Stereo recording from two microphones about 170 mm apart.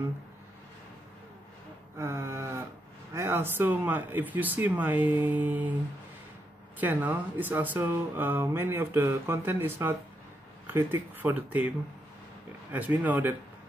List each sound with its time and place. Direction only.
2.0 s a sound: 15° right (ahead or behind)
3.1 s speech: 15° right (ahead or behind)
6.8 s speech: 10° right (ahead or behind)
12.7 s speech: 10° right (ahead or behind)